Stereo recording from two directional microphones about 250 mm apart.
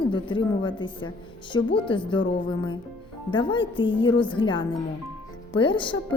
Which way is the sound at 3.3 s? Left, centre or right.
Centre.